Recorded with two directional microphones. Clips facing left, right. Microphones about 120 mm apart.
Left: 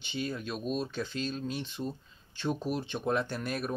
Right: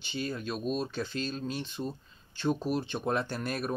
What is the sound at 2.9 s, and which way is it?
Speech, 20° right (ahead or behind).